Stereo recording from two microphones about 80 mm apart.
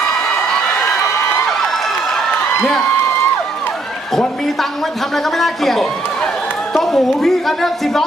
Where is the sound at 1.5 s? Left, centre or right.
Centre.